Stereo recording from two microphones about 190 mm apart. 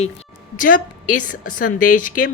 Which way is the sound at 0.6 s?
45° left (ahead or behind).